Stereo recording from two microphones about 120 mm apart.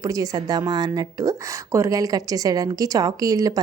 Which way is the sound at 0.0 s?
30° right (ahead or behind).